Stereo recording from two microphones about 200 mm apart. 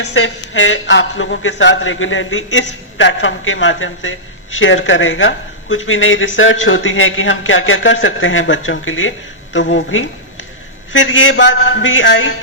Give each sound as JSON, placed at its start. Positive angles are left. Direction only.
{"t": 0.0, "sound": "speech", "side_deg": 70}